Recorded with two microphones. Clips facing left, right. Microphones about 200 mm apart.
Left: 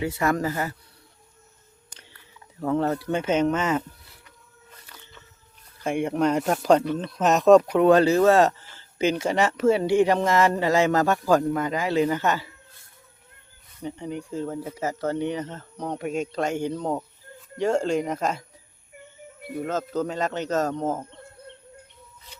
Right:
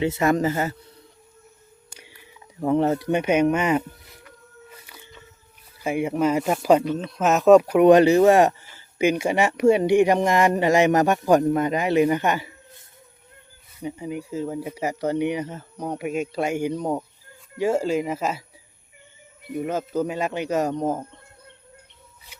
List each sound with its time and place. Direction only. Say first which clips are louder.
0.0 s speech: right 4 dB; 20° right (ahead or behind)
1.9 s speech: right 3 dB; 10° right (ahead or behind)
4.7 s a sound: right 4 dB; 10° right (ahead or behind)
5.8 s speech: right 1 dB; 5° right (ahead or behind)
19.5 s speech: right 2 dB; 15° right (ahead or behind)